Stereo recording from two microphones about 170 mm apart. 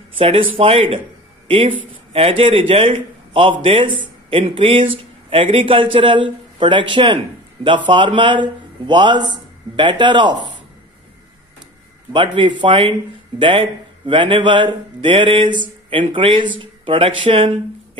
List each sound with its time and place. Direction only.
0.2 s speech: 35° right (ahead or behind)
2.1 s a man's voice: 35° right (ahead or behind)
12.4 s a man's voice: 30° right (ahead or behind)